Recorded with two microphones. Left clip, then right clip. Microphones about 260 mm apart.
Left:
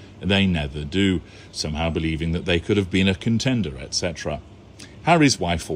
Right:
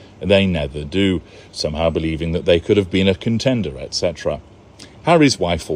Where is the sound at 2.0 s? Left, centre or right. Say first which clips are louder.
Right 7 dB; right.